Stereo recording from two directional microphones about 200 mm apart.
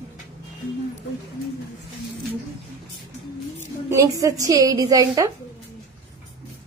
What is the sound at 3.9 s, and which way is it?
A woman's voice, 15° right (ahead or behind).